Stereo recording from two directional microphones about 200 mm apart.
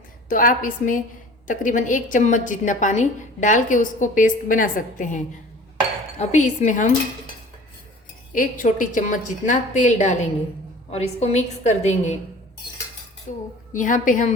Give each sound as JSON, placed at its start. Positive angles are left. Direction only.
{"t": 0.3, "sound": "a woman's voice", "side_deg": 45}
{"t": 8.3, "sound": "a woman's voice", "side_deg": 40}
{"t": 13.3, "sound": "a woman's voice", "side_deg": 35}